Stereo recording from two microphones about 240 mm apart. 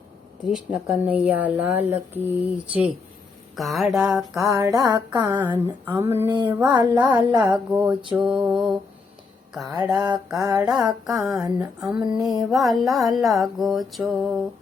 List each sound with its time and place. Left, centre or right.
0.5 s speech: centre
3.5 s music: centre
4.4 s speech: centre
7.5 s music: centre
9.6 s speech: centre
11.0 s music: centre